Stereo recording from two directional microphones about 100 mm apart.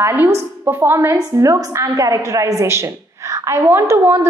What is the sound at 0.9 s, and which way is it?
A woman's voice, 30° right (ahead or behind).